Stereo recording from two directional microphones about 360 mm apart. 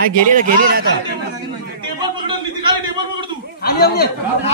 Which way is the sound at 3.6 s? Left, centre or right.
Left.